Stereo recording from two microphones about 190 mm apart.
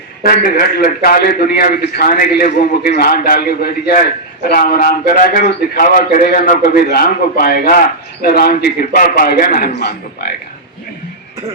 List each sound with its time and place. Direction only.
0.2 s a man's voice: 50° left (ahead or behind)